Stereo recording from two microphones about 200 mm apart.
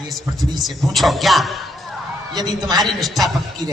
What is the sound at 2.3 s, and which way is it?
Speech, 20° right (ahead or behind).